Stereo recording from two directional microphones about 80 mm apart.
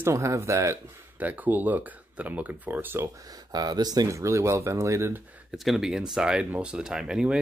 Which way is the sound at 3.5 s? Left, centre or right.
Right.